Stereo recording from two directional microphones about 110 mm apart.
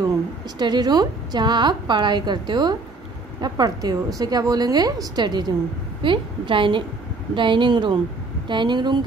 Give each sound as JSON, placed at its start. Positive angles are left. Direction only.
{"t": 0.6, "sound": "a woman's voice", "side_deg": -40}